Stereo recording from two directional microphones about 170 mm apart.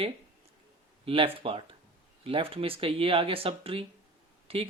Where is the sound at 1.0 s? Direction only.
30° right (ahead or behind).